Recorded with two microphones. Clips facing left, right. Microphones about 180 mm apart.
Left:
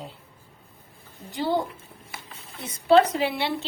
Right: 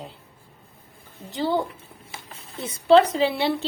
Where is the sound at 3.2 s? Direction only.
35° right (ahead or behind).